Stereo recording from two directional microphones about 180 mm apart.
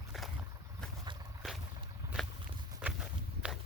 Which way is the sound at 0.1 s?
Centre (ahead or behind).